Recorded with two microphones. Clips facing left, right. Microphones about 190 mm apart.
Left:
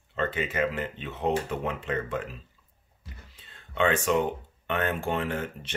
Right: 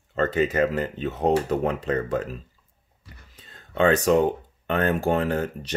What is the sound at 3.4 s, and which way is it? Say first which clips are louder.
Speech: right 5 dB; 40° right (ahead or behind).